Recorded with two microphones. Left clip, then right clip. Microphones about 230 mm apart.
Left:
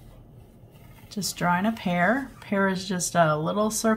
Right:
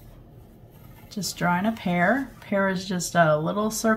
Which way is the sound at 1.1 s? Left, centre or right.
Centre.